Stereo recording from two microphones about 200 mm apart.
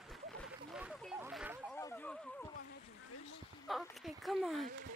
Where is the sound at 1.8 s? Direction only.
10° left (ahead or behind).